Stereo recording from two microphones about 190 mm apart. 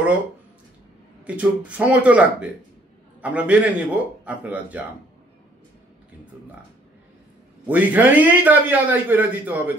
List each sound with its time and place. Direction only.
1.2 s a man's voice: 5° right (ahead or behind)
7.6 s a man's voice: 10° right (ahead or behind)